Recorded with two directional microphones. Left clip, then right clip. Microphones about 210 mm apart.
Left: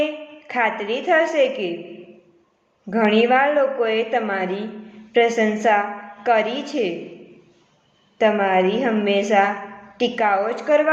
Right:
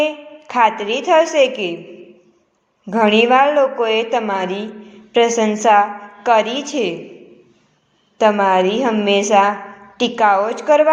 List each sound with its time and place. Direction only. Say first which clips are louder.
0.0 s a woman's voice: right 5 dB; 30° right (ahead or behind)
2.8 s a woman's voice: right 4 dB; 30° right (ahead or behind)
8.2 s a woman's voice: right 4 dB; 30° right (ahead or behind)